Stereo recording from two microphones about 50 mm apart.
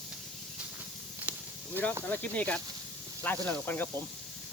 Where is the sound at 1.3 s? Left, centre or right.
Right.